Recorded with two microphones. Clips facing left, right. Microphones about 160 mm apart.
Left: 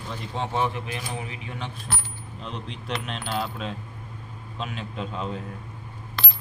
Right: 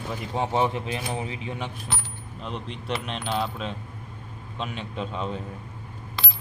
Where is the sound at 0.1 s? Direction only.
10° right (ahead or behind).